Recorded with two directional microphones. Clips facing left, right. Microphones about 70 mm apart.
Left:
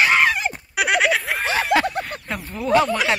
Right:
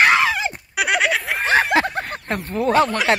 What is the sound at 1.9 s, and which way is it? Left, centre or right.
Fowl, right.